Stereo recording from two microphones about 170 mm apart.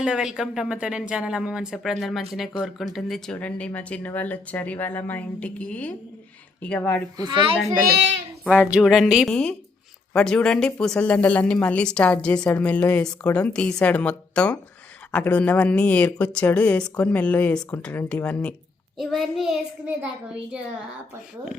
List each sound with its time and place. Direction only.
0.0 s speech: 5° right (ahead or behind)
7.3 s a child's voice: 30° right (ahead or behind)
7.9 s a child's voice: 90° right
8.4 s speech: 5° right (ahead or behind)